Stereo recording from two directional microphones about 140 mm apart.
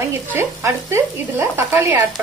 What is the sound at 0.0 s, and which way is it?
Stir, 15° right (ahead or behind).